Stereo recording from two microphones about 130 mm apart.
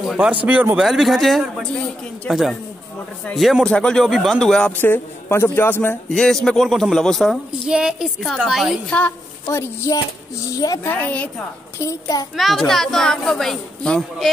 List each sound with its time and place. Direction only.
0.0 s a woman's voice: 5° right (ahead or behind); by 6.1 s 15° left (ahead or behind)
6.1 s a woman's voice: 5° left (ahead or behind)
8.9 s a woman's voice: 15° left (ahead or behind)
11.8 s a woman's voice: 25° left (ahead or behind)
12.4 s a woman's voice: centre (ahead or behind)